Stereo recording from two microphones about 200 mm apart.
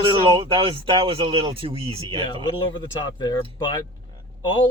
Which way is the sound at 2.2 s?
25° left (ahead or behind).